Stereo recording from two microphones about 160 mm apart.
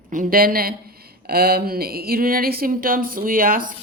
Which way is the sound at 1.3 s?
75° right (ahead or behind).